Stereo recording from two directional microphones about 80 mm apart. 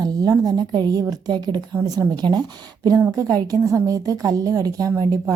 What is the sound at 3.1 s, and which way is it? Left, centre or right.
A woman's voice, right.